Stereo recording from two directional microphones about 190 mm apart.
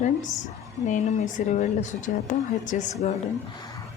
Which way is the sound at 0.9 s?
40° left (ahead or behind).